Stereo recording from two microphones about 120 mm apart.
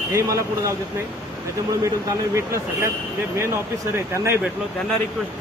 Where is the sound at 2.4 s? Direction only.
25° right (ahead or behind).